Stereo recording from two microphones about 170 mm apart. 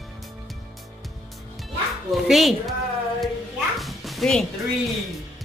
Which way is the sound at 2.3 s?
Centre (ahead or behind).